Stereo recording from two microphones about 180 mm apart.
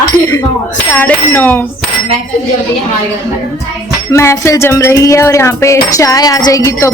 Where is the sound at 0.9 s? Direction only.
10° left (ahead or behind).